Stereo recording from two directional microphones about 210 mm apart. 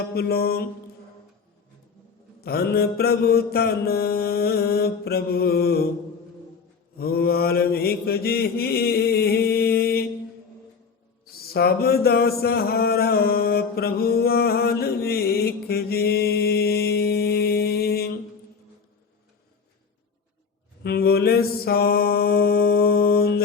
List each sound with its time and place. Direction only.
0.1 s mantra: 50° left (ahead or behind)
2.4 s mantra: 50° left (ahead or behind)
7.0 s mantra: 45° left (ahead or behind)
11.3 s a sound: 45° left (ahead or behind)
20.8 s mantra: 45° left (ahead or behind)